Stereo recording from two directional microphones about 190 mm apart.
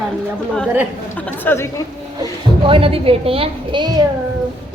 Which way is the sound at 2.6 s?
30° right (ahead or behind).